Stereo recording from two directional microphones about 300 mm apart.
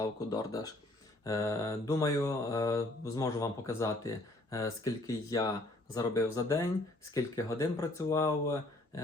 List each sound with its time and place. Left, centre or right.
0.0 s mantra: centre